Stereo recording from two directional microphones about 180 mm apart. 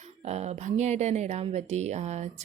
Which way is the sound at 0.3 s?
35° right (ahead or behind).